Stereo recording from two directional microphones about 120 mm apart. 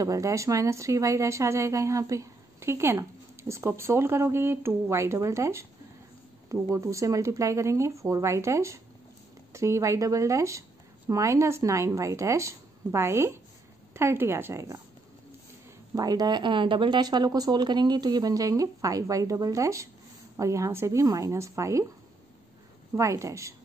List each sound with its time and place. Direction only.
0.0 s speech: 25° right (ahead or behind)
15.9 s speech: 30° right (ahead or behind)
22.9 s speech: 25° right (ahead or behind)